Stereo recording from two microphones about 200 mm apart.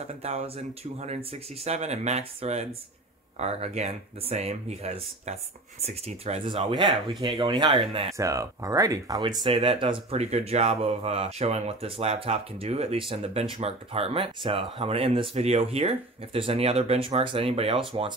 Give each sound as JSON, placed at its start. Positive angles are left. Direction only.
{"t": 0.0, "sound": "speech", "side_deg": -35}
{"t": 8.2, "sound": "speech", "side_deg": -15}